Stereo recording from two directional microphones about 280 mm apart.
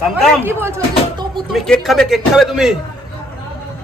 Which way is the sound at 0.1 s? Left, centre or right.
Centre.